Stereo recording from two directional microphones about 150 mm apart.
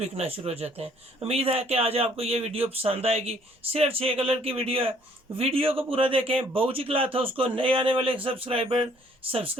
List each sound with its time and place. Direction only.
0.0 s speech: 40° right (ahead or behind)